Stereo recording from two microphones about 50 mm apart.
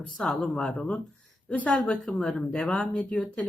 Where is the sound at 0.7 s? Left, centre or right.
Left.